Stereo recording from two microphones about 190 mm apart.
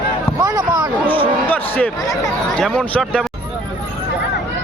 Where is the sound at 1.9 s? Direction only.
20° left (ahead or behind).